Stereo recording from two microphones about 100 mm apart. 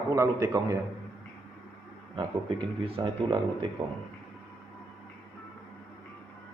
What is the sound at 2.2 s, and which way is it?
A man's voice, 55° right (ahead or behind).